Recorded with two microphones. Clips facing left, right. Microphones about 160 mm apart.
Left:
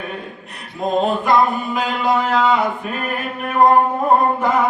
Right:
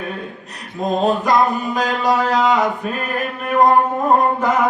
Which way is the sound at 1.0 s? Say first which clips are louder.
Right 2 dB; 40° right (ahead or behind).